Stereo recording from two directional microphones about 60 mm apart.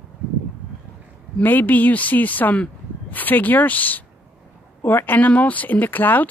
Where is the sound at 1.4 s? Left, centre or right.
Left.